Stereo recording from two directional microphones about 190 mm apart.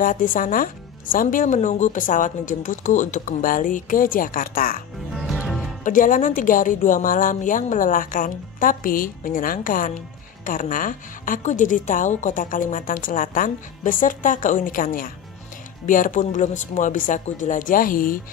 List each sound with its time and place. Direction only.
0.0 s a woman's voice: 45° left (ahead or behind)
5.1 s music: centre (ahead or behind)
5.9 s a woman's voice: 45° left (ahead or behind)